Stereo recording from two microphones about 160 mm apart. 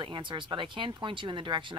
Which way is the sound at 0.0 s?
30° right (ahead or behind).